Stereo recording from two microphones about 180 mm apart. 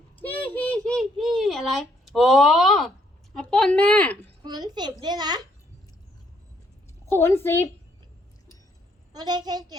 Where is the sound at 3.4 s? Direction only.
5° left (ahead or behind).